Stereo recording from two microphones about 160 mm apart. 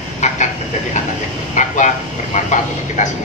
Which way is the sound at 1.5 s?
50° left (ahead or behind).